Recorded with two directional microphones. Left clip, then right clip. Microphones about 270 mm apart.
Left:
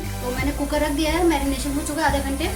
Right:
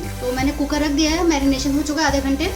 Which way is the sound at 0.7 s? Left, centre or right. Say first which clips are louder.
Right 1 dB; right.